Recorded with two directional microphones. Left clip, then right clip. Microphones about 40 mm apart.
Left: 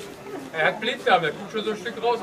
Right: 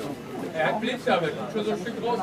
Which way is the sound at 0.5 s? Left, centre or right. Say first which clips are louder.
Left 3 dB; left.